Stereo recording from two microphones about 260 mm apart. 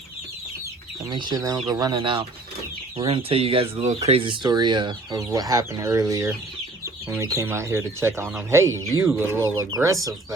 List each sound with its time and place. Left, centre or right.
1.1 s speech: centre